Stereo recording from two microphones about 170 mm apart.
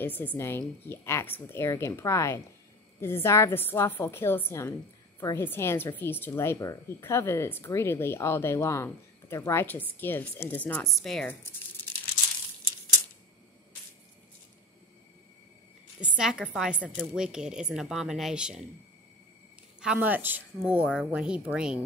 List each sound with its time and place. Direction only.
0.0 s a woman's voice: 10° left (ahead or behind)
16.0 s a woman's voice: 5° right (ahead or behind)
19.8 s a woman's voice: 5° right (ahead or behind)